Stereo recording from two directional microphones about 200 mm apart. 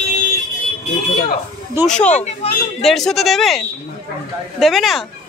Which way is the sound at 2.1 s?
30° left (ahead or behind).